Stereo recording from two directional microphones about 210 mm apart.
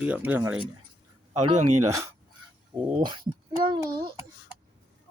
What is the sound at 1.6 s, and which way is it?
Speech, 90° right.